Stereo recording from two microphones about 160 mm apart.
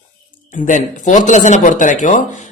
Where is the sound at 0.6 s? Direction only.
50° left (ahead or behind).